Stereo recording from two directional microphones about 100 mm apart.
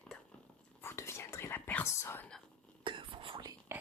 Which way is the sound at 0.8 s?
25° left (ahead or behind).